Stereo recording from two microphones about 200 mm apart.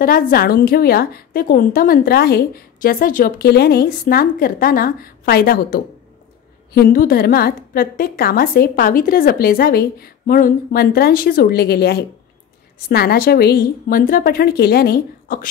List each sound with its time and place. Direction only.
0.0 s a woman's voice: 45° left (ahead or behind)